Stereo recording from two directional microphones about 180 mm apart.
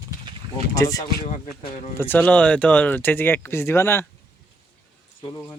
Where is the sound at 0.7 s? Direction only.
20° left (ahead or behind).